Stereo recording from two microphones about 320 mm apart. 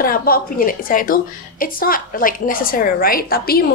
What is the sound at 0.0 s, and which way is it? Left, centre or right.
A woman's voice, left.